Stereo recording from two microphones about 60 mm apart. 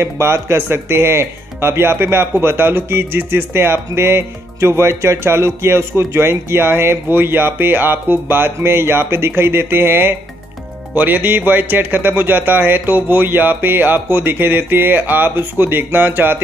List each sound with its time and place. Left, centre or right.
0.0 s a man's voice: right